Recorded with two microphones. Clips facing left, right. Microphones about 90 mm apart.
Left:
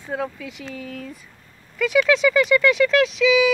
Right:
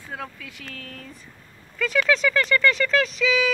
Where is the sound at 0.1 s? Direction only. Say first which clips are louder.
Left 8 dB; 10° left (ahead or behind).